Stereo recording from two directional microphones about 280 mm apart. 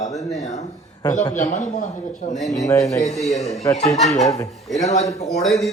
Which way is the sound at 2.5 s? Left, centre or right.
Centre.